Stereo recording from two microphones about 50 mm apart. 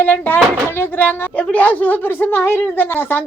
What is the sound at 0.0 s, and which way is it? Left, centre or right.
A woman's voice, left.